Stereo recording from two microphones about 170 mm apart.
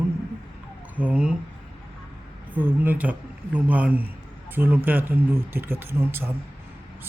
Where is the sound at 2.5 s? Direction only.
10° right (ahead or behind).